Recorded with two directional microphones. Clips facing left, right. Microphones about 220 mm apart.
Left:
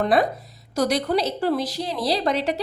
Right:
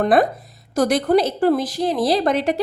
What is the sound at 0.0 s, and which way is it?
A woman's voice, 50° right (ahead or behind).